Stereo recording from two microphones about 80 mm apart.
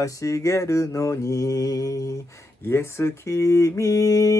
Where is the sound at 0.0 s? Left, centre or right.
Left.